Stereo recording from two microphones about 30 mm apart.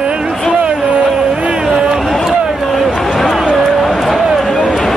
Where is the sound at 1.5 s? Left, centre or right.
Right.